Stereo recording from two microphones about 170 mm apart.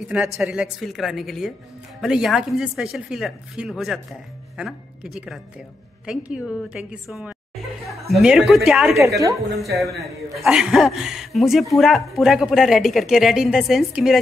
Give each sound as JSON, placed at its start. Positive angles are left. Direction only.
{"t": 0.4, "sound": "speech", "side_deg": 0}
{"t": 8.9, "sound": "a woman's voice", "side_deg": -20}
{"t": 9.8, "sound": "speech", "side_deg": 0}